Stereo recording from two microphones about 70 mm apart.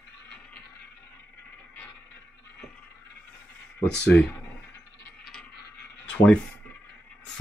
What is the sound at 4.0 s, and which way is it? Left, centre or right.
Speech, centre.